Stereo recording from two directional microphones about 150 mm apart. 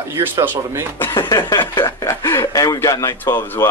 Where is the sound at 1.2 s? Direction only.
25° left (ahead or behind).